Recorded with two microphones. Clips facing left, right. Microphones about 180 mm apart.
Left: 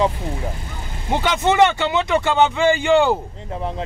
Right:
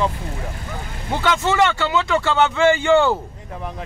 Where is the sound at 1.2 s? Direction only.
20° left (ahead or behind).